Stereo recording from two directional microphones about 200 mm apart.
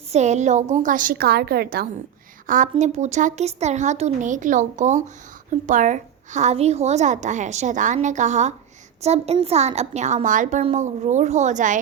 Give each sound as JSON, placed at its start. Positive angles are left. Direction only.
{"t": 0.1, "sound": "a woman's voice", "side_deg": -35}
{"t": 2.5, "sound": "a woman's voice", "side_deg": -40}